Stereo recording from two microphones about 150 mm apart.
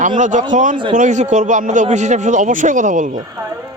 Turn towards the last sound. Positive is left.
turn(degrees=-60)  # may be behind; listen again after turning